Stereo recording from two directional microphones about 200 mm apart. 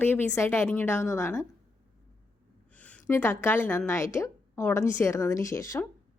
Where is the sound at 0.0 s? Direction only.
10° left (ahead or behind).